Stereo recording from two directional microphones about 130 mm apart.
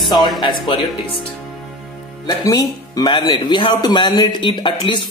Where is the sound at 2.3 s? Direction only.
30° left (ahead or behind).